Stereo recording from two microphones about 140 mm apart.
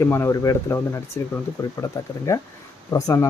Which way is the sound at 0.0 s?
20° left (ahead or behind).